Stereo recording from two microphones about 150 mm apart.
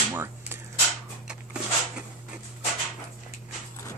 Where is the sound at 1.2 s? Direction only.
5° right (ahead or behind).